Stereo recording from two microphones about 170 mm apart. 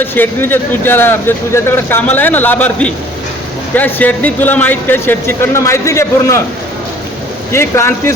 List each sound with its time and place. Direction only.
0.0 s speech: 10° left (ahead or behind)
7.5 s speech: 15° left (ahead or behind)